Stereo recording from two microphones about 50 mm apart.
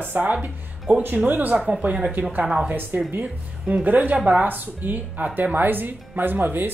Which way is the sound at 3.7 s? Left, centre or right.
Right.